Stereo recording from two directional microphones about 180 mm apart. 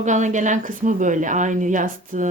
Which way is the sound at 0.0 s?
40° right (ahead or behind).